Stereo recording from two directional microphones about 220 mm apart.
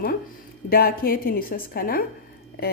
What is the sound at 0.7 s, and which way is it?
Speech, 45° left (ahead or behind).